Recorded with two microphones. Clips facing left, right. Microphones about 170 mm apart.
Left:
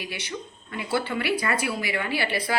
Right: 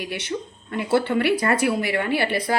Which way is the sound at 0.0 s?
60° right (ahead or behind).